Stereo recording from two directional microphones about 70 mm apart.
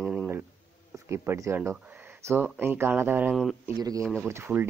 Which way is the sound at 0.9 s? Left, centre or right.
Right.